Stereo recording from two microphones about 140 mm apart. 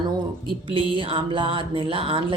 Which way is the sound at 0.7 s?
40° right (ahead or behind).